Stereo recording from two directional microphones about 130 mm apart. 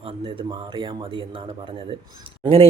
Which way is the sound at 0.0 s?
50° right (ahead or behind).